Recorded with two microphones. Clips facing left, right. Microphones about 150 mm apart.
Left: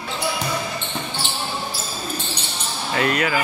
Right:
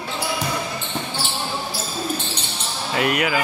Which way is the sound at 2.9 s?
15° right (ahead or behind).